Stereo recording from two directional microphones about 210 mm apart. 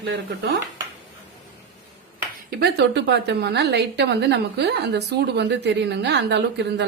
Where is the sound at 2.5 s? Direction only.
50° right (ahead or behind).